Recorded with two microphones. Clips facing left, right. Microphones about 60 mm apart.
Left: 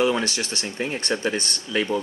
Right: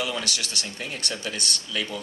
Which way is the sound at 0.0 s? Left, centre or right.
Left.